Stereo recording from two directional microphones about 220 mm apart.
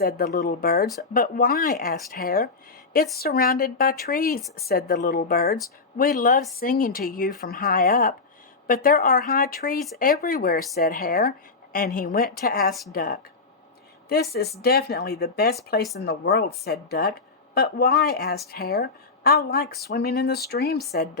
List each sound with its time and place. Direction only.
0.0 s speech: 45° left (ahead or behind)
14.6 s speech: 45° left (ahead or behind)